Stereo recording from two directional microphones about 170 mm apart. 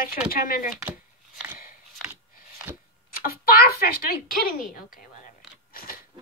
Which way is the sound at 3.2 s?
60° left (ahead or behind).